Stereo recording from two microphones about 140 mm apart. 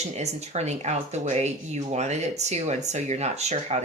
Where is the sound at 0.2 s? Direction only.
50° right (ahead or behind).